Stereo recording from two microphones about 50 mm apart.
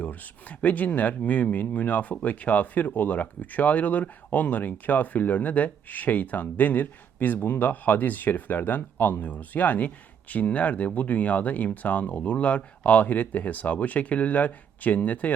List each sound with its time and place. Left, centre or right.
0.0 s speech: left